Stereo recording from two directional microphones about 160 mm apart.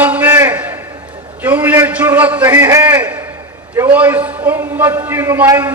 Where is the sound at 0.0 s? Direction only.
10° right (ahead or behind).